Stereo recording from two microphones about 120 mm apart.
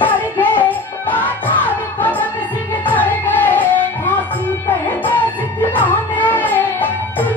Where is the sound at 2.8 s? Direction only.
15° left (ahead or behind).